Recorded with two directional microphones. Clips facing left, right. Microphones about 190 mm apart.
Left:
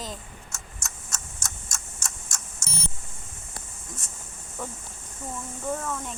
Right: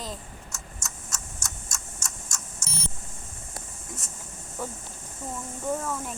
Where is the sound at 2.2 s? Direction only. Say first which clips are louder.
Right 1 dB; 30° left (ahead or behind).